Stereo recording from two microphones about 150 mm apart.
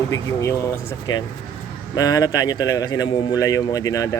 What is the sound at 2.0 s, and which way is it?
A man's voice, 25° left (ahead or behind).